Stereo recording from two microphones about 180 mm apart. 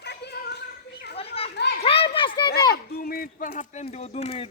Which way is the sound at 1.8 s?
30° left (ahead or behind).